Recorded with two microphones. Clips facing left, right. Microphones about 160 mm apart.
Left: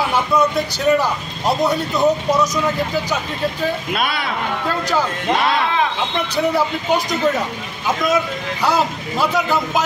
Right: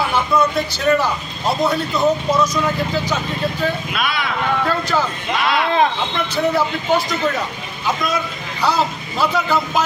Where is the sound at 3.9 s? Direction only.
30° left (ahead or behind).